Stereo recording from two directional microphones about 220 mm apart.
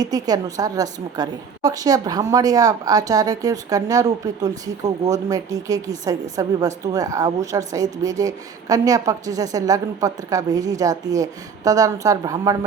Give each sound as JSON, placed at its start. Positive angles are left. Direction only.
{"t": 0.0, "sound": "a woman's voice", "side_deg": -15}